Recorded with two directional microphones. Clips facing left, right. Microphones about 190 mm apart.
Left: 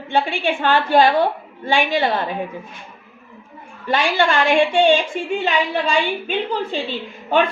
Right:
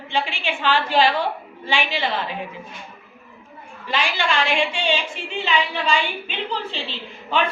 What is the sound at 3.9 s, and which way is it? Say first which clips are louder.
A woman's voice: left 6 dB; 50° left (ahead or behind).